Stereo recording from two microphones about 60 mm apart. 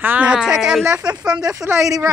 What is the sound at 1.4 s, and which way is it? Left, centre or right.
Speech, right.